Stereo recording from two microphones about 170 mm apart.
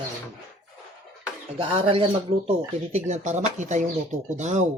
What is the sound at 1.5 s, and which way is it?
Speech, 30° right (ahead or behind).